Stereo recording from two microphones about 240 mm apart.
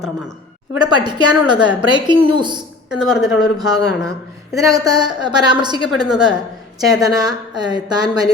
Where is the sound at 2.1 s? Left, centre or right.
Centre.